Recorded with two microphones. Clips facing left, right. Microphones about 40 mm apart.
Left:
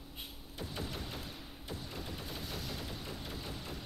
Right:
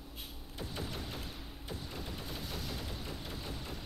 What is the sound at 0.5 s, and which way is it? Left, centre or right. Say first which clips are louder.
Fusillade: even; centre.